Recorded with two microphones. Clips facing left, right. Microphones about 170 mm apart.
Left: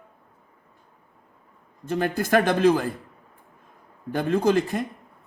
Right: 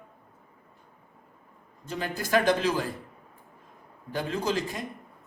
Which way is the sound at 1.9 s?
55° left (ahead or behind).